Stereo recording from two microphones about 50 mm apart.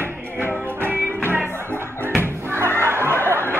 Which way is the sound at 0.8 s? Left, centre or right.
Right.